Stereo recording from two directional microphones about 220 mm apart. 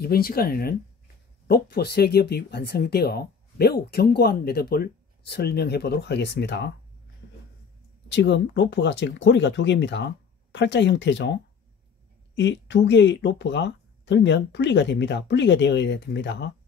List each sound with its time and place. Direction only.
0.0 s speech: 45° left (ahead or behind)
8.1 s speech: 50° left (ahead or behind)
12.4 s speech: 55° left (ahead or behind)